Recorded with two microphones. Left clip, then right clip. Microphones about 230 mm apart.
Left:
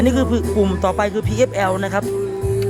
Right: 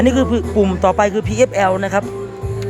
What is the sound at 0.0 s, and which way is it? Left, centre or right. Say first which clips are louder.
Speech: right 3 dB; centre.